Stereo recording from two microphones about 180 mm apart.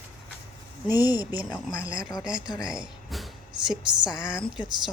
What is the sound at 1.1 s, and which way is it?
Speech, 10° right (ahead or behind).